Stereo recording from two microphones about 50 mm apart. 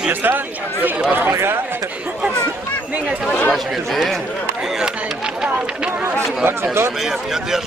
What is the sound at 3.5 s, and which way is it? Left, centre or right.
Speech, centre.